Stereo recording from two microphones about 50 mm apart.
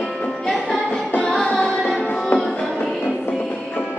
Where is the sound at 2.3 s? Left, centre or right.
Centre.